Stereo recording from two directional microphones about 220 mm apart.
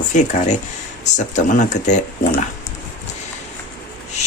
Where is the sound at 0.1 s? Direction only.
35° left (ahead or behind).